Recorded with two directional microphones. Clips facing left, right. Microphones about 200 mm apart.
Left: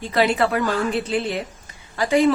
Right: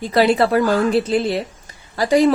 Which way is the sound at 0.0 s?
35° right (ahead or behind).